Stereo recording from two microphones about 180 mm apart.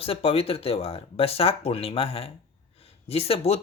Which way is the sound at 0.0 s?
30° left (ahead or behind).